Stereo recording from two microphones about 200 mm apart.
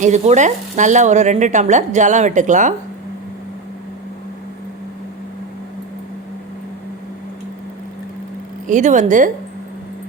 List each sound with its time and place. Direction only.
0.0 s speech: 35° right (ahead or behind)
8.6 s speech: 40° right (ahead or behind)